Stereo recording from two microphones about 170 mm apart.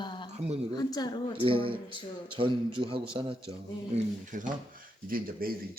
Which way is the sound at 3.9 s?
50° right (ahead or behind).